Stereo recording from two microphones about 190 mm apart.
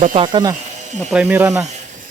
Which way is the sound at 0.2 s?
25° right (ahead or behind).